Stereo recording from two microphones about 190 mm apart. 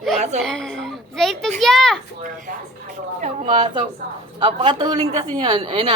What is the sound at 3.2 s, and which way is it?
Speech, 40° right (ahead or behind).